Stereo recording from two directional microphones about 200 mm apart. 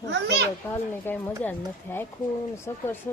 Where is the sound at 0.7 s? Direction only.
10° left (ahead or behind).